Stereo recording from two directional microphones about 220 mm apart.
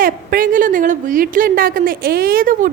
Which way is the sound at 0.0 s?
40° right (ahead or behind).